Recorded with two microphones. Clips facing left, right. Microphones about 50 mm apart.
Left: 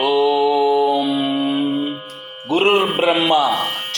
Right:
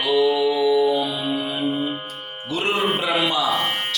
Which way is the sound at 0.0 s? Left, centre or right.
Left.